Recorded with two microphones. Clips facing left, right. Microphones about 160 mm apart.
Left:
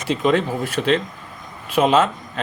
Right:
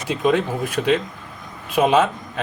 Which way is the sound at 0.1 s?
10° right (ahead or behind).